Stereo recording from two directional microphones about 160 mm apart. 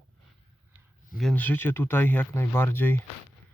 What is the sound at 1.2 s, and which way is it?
Speech, 5° left (ahead or behind).